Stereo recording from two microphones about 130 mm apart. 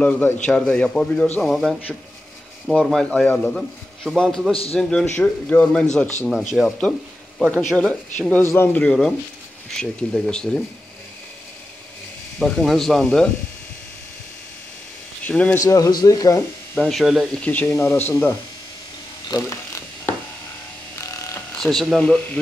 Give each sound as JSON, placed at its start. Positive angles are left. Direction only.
{"t": 0.0, "sound": "speech", "side_deg": 10}
{"t": 3.0, "sound": "speech", "side_deg": 5}
{"t": 4.5, "sound": "a man's voice", "side_deg": 50}
{"t": 4.7, "sound": "speech", "side_deg": 5}
{"t": 12.4, "sound": "speech", "side_deg": 5}
{"t": 15.2, "sound": "speech", "side_deg": 10}
{"t": 15.6, "sound": "speech", "side_deg": 25}
{"t": 16.7, "sound": "speech", "side_deg": 5}
{"t": 19.2, "sound": "electric shaver", "side_deg": 30}
{"t": 21.0, "sound": "electric shaver", "side_deg": 25}
{"t": 21.5, "sound": "speech", "side_deg": 5}